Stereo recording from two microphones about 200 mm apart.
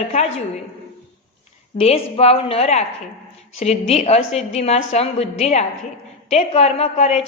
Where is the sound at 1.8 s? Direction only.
30° left (ahead or behind).